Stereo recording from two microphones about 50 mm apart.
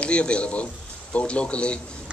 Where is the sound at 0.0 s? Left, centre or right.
Left.